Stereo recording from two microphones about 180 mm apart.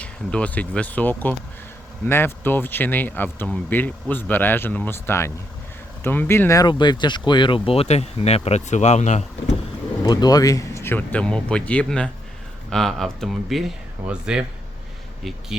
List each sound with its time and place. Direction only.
0.0 s speech: 5° left (ahead or behind); by 9.2 s 40° left (ahead or behind)
10.0 s speech: 20° left (ahead or behind); by 15.5 s centre (ahead or behind)